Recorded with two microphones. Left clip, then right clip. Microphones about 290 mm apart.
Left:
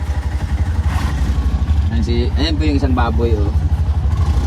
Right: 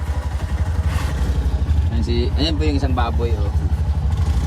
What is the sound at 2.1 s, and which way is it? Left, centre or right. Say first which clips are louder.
Speech: left 1 dB; centre.